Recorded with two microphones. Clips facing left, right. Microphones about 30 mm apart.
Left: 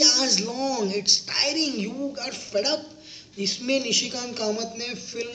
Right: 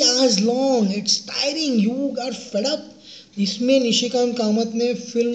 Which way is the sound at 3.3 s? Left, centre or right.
Right.